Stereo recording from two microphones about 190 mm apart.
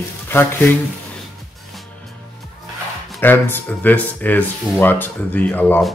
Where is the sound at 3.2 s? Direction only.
10° left (ahead or behind).